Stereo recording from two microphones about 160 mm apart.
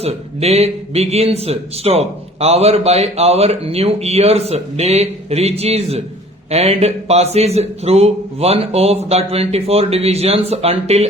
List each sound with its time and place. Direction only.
0.0 s a man's voice: 40° right (ahead or behind)